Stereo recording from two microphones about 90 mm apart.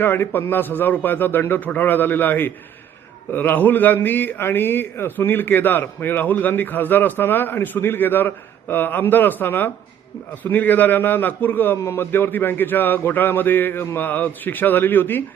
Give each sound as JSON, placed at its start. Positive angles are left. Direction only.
{"t": 0.0, "sound": "a man's voice", "side_deg": 25}